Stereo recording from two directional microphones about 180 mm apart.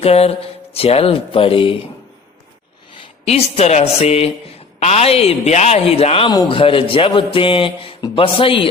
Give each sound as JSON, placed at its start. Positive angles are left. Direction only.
{"t": 0.0, "sound": "speech", "side_deg": 35}
{"t": 2.9, "sound": "speech", "side_deg": 30}